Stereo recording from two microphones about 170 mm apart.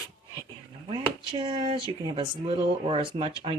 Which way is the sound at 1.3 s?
30° right (ahead or behind).